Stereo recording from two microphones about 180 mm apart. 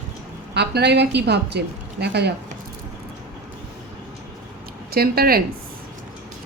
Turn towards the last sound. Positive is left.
turn(degrees=-55)  # may be behind; listen again after turning